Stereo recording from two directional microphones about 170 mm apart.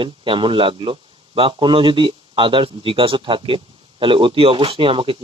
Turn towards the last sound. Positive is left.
turn(degrees=-30)  # may be behind; listen again after turning